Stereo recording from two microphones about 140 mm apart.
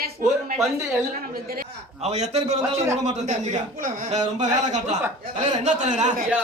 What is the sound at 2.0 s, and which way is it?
A man's voice, 50° right (ahead or behind).